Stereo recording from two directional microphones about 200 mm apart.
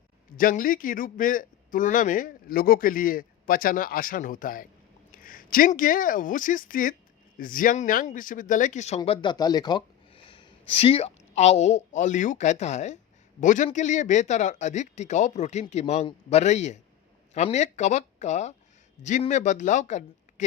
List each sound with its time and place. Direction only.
0.3 s a man's voice: 45° left (ahead or behind)
9.0 s speech: 20° left (ahead or behind); by 20.4 s 35° left (ahead or behind)